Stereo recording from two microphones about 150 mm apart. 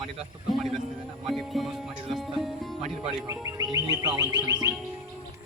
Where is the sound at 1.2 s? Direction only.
Centre (ahead or behind).